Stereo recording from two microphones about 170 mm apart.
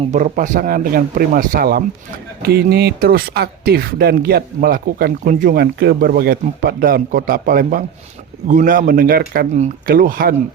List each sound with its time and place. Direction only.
0.1 s speech: 45° right (ahead or behind)